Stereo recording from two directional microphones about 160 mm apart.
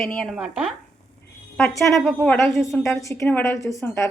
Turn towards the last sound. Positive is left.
turn(degrees=20)  # may be behind; listen again after turning